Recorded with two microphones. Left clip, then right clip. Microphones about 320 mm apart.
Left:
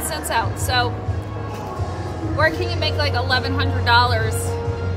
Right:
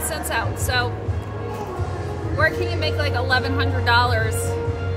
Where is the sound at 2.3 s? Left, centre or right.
Centre.